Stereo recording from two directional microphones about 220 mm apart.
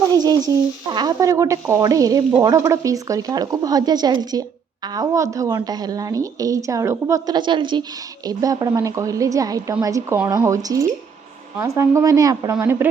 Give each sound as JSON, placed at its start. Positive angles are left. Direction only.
{"t": 0.2, "sound": "speech", "side_deg": -15}